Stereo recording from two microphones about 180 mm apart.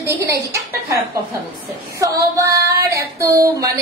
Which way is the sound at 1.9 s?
20° right (ahead or behind).